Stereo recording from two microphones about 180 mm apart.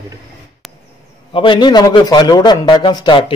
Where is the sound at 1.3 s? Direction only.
25° left (ahead or behind).